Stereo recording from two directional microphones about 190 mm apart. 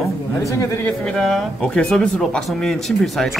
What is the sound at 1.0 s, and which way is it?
Speech, centre (ahead or behind).